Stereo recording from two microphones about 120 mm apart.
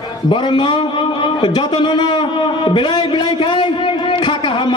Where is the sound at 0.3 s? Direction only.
40° left (ahead or behind).